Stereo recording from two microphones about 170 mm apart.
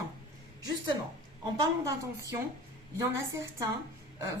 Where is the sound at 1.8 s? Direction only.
20° right (ahead or behind).